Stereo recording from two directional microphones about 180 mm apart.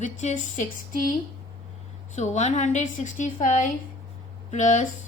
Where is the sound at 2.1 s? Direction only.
40° left (ahead or behind).